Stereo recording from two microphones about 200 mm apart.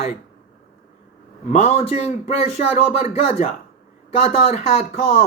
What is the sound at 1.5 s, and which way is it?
Speech, 35° left (ahead or behind).